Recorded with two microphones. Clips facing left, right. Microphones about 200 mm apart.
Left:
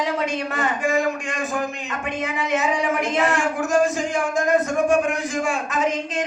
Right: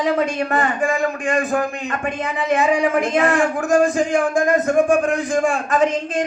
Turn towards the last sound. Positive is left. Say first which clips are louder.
# right 6 dB
turn(degrees=-55)  # may be behind; listen again after turning